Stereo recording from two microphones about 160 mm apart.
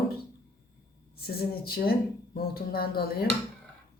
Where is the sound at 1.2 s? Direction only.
75° left (ahead or behind).